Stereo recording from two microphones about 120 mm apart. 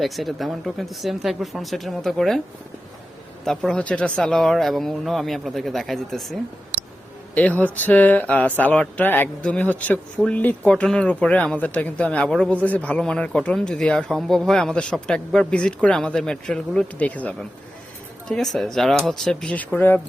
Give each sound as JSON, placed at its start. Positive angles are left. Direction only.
{"t": 0.0, "sound": "speech", "side_deg": 0}
{"t": 3.4, "sound": "speech", "side_deg": 5}
{"t": 7.3, "sound": "speech", "side_deg": 15}